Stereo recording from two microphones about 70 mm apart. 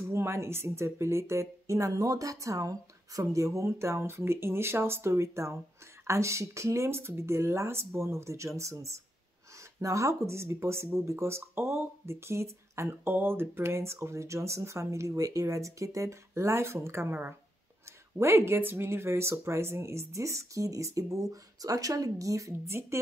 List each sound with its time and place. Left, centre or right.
0.1 s speech: right
13.0 s speech: right